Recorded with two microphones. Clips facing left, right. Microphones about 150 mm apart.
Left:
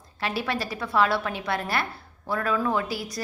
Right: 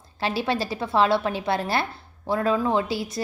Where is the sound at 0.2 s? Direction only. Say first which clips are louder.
Right 3 dB; 30° right (ahead or behind).